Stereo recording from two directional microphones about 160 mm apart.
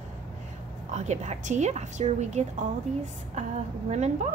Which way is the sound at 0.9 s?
45° right (ahead or behind).